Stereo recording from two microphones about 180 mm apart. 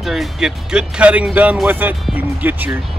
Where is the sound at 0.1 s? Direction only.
5° right (ahead or behind).